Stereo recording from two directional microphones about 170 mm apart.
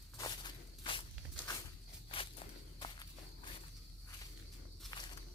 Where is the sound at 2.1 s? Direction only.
30° left (ahead or behind).